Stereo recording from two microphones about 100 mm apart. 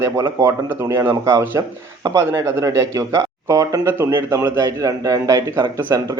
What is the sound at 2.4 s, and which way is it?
A man's voice, 30° right (ahead or behind).